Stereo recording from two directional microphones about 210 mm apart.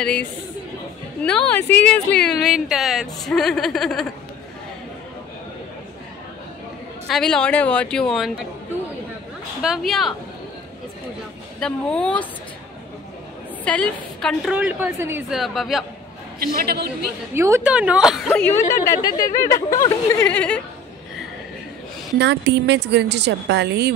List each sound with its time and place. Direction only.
0.0 s speech: 5° left (ahead or behind)
7.1 s speech: centre (ahead or behind)
9.6 s speech: centre (ahead or behind)
11.6 s speech: 5° left (ahead or behind)
13.7 s speech: 5° left (ahead or behind)
16.3 s a woman's voice: 45° right (ahead or behind)
17.3 s a woman's voice: 10° right (ahead or behind); by 20.6 s 5° left (ahead or behind)
22.2 s a woman's voice: 55° right (ahead or behind)